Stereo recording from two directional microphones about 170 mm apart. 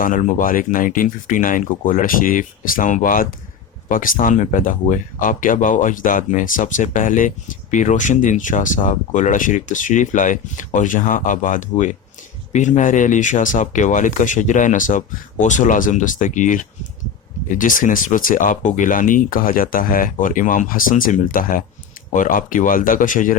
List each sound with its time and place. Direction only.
0.0 s speech: 50° left (ahead or behind)